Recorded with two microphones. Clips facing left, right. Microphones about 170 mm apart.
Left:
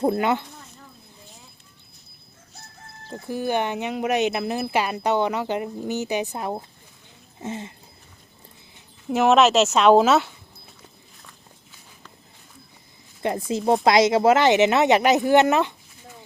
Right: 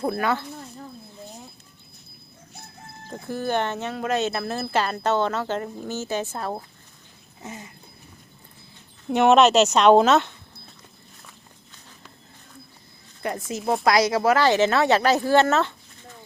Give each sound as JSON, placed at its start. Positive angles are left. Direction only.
{"t": 0.0, "sound": "speech", "side_deg": 20}
{"t": 3.2, "sound": "speech", "side_deg": 10}
{"t": 7.4, "sound": "speech", "side_deg": 25}
{"t": 9.0, "sound": "speech", "side_deg": 0}
{"t": 11.2, "sound": "walk", "side_deg": 0}
{"t": 13.2, "sound": "speech", "side_deg": 25}